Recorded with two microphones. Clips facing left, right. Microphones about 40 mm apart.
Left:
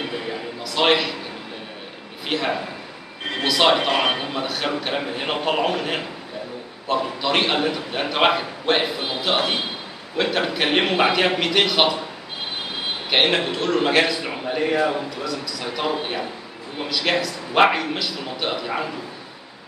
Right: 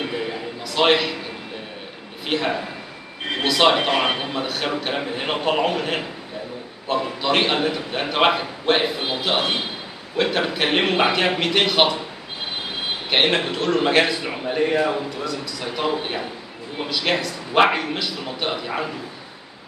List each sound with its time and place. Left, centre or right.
0.0 s a sound: centre
2.2 s a man's voice: centre
13.1 s a man's voice: centre